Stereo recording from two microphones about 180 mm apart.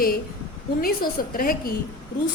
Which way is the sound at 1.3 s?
55° left (ahead or behind).